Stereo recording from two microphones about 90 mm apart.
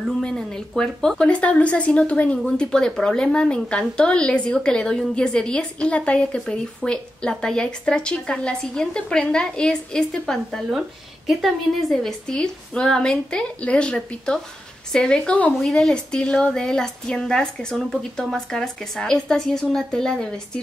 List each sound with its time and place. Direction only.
0.2 s a woman's voice: 10° left (ahead or behind)